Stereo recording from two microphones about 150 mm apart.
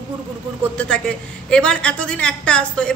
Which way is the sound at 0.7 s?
5° left (ahead or behind).